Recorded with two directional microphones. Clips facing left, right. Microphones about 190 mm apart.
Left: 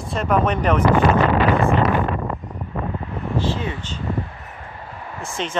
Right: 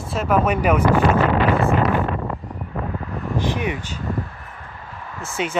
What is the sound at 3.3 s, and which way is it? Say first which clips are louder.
Vehicle: right 1 dB; 15° right (ahead or behind).